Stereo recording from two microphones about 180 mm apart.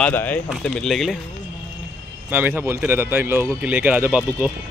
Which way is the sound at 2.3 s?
10° right (ahead or behind).